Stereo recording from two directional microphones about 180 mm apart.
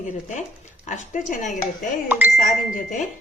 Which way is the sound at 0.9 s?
45° left (ahead or behind).